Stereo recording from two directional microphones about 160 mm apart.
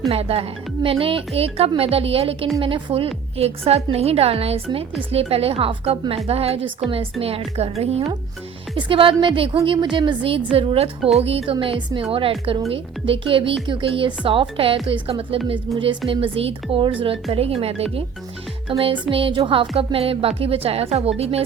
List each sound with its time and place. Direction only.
0.1 s a woman's voice: 40° right (ahead or behind)